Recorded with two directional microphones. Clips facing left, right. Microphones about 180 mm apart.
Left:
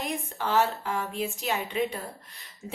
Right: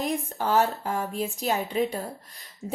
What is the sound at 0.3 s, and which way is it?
A woman's voice, 40° right (ahead or behind).